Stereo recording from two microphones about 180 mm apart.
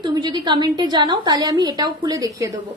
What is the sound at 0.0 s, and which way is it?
A woman's voice, 20° right (ahead or behind).